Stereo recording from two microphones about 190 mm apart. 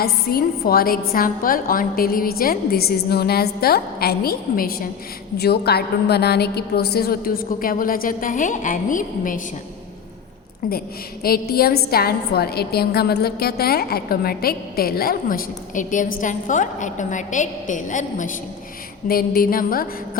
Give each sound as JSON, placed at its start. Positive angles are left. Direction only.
{"t": 0.0, "sound": "a woman's voice", "side_deg": 55}
{"t": 10.7, "sound": "a woman's voice", "side_deg": 55}